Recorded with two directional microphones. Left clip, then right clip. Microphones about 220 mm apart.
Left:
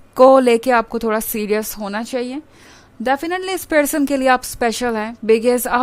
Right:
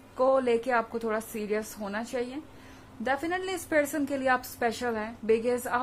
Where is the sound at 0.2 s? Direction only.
50° left (ahead or behind).